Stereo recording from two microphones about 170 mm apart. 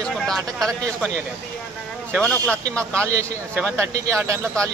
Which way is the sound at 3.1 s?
15° right (ahead or behind).